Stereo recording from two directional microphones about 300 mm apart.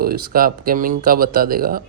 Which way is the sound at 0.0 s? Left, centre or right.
Right.